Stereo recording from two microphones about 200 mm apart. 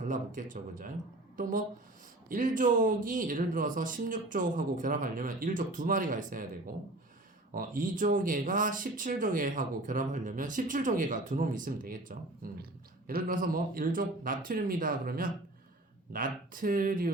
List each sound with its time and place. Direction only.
0.0 s speech: 40° right (ahead or behind)
7.5 s speech: 45° right (ahead or behind)